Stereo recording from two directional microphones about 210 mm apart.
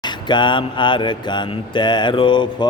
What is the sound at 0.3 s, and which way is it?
Mantra, 20° left (ahead or behind).